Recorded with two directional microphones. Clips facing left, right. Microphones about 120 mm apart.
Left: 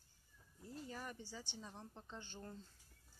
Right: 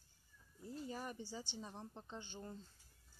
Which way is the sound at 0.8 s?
20° right (ahead or behind).